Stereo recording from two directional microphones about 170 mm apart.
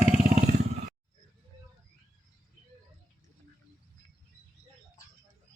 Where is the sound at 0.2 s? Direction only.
45° right (ahead or behind).